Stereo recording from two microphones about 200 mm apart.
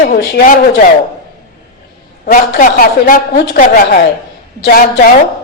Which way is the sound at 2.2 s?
45° left (ahead or behind).